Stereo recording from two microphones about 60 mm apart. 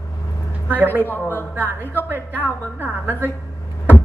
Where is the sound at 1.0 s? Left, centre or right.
Left.